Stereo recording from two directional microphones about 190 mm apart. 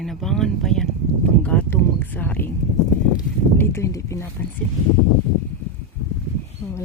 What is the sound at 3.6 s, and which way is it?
Speech, 15° left (ahead or behind).